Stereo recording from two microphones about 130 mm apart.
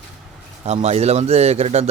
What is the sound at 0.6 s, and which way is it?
A man's voice, 55° right (ahead or behind).